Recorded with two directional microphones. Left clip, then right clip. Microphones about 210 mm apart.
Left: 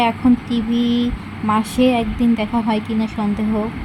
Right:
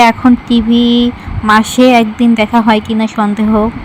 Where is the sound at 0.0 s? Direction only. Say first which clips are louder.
Right 9 dB; 20° right (ahead or behind).